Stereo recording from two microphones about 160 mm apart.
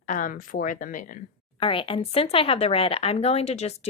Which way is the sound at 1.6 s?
35° left (ahead or behind).